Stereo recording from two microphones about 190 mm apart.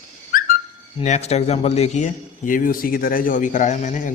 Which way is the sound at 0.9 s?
35° left (ahead or behind).